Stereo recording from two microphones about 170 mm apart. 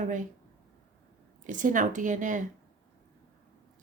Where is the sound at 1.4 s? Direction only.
50° right (ahead or behind).